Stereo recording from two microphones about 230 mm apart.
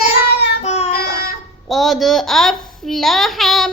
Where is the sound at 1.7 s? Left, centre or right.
Centre.